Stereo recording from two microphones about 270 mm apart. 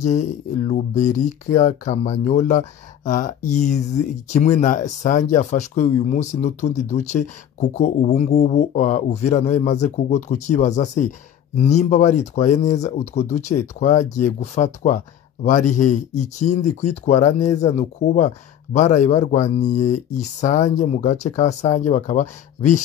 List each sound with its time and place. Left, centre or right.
0.0 s speech: left